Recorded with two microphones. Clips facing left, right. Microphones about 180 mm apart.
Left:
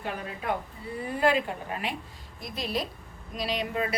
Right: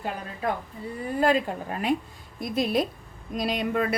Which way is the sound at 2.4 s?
50° right (ahead or behind).